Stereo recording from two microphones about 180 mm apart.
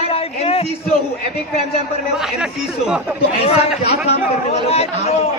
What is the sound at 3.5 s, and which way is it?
A man's voice, 35° left (ahead or behind).